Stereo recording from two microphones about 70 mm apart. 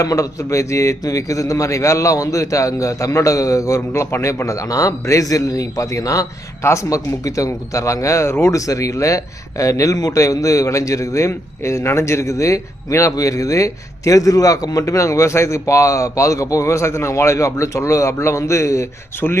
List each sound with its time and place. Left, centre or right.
0.0 s a man's voice: left
3.8 s a man's voice: left
19.1 s speech: left